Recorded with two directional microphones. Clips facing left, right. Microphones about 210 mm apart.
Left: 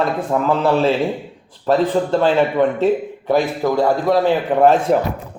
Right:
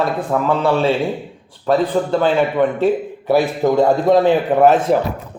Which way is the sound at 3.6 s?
20° right (ahead or behind).